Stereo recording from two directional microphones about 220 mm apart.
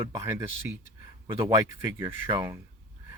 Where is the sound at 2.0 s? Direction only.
15° right (ahead or behind).